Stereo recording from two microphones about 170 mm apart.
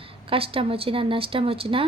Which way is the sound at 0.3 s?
35° right (ahead or behind).